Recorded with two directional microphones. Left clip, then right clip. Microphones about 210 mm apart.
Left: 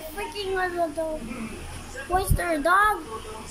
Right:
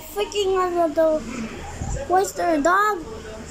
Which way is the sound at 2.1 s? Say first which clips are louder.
Right 6 dB; 5° right (ahead or behind).